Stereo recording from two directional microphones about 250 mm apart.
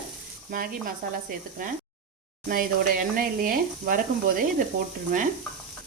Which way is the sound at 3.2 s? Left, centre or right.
Right.